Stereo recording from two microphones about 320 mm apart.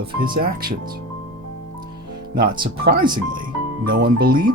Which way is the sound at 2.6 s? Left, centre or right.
Centre.